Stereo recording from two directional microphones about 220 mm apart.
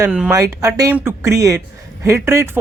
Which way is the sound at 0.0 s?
5° right (ahead or behind).